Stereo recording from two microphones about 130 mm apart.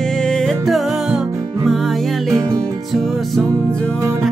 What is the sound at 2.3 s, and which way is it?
Music, 25° right (ahead or behind).